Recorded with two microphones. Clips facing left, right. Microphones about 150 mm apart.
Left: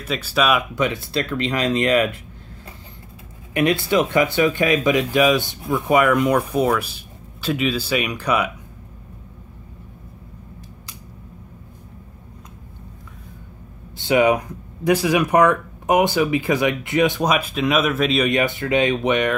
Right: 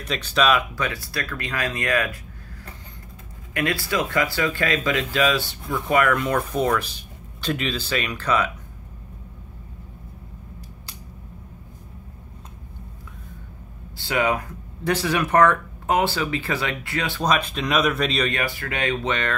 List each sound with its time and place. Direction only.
0.0 s speech: 5° left (ahead or behind); by 2.1 s 20° left (ahead or behind)
3.5 s speech: 20° left (ahead or behind)
13.9 s speech: 20° left (ahead or behind); by 18.3 s 5° left (ahead or behind)
18.3 s speech: 20° left (ahead or behind)